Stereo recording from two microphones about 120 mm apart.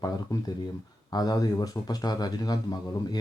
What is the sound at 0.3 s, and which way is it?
Speech, 30° left (ahead or behind).